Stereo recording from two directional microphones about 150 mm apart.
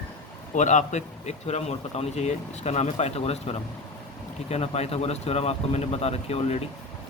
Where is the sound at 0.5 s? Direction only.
55° left (ahead or behind).